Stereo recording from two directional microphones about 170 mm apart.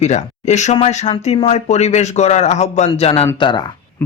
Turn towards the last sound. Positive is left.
turn(degrees=30)  # may be behind; listen again after turning